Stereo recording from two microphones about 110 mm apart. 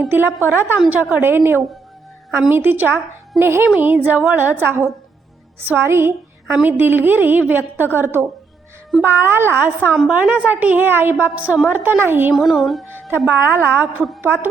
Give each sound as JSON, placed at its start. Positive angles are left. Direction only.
{"t": 0.1, "sound": "a woman's voice", "side_deg": -20}
{"t": 12.3, "sound": "speech", "side_deg": 0}
{"t": 13.1, "sound": "a woman's voice", "side_deg": -20}